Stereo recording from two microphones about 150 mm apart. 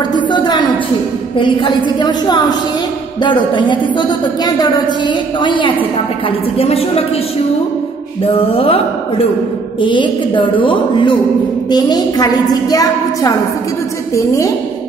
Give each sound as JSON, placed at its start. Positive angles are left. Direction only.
{"t": 0.1, "sound": "a sound", "side_deg": 30}
{"t": 1.3, "sound": "a woman's voice", "side_deg": 30}
{"t": 8.2, "sound": "a woman's voice", "side_deg": 40}